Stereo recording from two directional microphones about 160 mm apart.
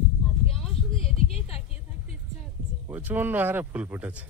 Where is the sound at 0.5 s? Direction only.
Centre (ahead or behind).